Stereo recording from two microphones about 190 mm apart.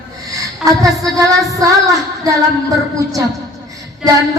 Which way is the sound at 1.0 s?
20° right (ahead or behind).